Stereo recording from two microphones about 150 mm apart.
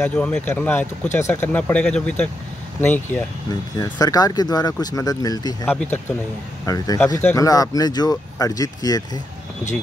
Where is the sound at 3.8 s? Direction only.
25° left (ahead or behind).